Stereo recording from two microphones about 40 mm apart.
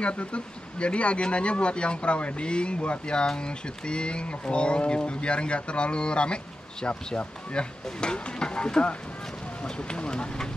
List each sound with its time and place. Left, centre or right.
0.0 s speech: left